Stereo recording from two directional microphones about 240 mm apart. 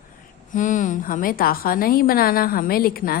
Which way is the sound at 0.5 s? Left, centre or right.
Left.